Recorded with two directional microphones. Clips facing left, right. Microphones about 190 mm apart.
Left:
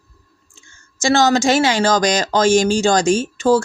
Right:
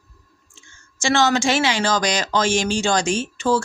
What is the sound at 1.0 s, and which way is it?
Speech, 40° left (ahead or behind).